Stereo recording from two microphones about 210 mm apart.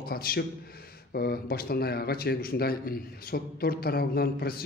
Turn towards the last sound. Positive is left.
turn(degrees=45)  # may be behind; listen again after turning